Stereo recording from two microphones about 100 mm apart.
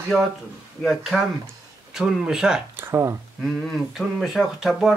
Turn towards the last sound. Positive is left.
turn(degrees=-5)  # may be behind; listen again after turning